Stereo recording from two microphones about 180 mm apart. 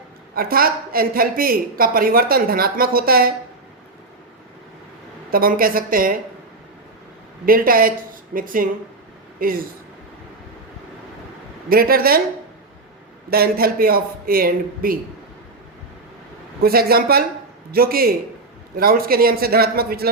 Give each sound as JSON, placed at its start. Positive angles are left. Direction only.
{"t": 0.3, "sound": "speech", "side_deg": -55}
{"t": 5.3, "sound": "speech", "side_deg": -55}
{"t": 7.4, "sound": "speech", "side_deg": -55}
{"t": 11.7, "sound": "speech", "side_deg": -55}
{"t": 13.3, "sound": "speech", "side_deg": -55}
{"t": 16.6, "sound": "a man's voice", "side_deg": -55}